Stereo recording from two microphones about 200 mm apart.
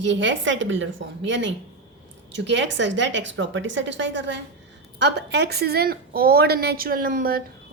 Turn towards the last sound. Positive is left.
turn(degrees=-45)  # may be behind; listen again after turning